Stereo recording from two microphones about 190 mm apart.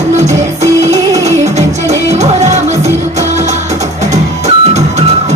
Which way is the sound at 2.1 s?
35° right (ahead or behind).